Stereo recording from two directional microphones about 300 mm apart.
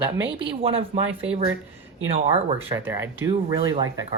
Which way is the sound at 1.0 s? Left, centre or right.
Centre.